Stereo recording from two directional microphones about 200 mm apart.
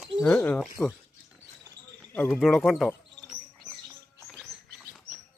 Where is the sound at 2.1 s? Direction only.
5° left (ahead or behind).